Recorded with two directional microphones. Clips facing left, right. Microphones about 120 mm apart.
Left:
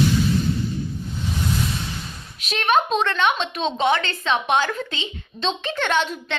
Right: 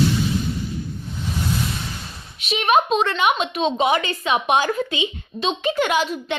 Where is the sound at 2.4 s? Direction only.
5° right (ahead or behind).